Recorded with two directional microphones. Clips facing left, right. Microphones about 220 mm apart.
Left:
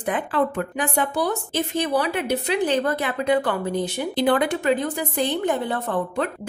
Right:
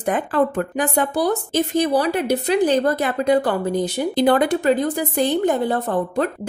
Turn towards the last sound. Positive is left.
turn(degrees=-40)  # may be behind; listen again after turning